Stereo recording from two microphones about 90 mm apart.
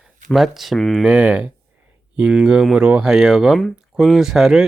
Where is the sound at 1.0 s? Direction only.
10° right (ahead or behind).